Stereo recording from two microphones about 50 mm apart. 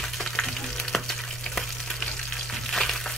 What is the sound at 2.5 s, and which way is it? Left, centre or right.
Frying, centre.